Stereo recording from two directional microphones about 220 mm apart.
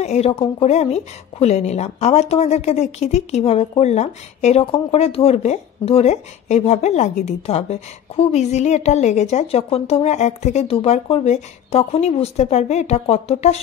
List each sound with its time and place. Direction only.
0.0 s a woman's voice: 30° left (ahead or behind)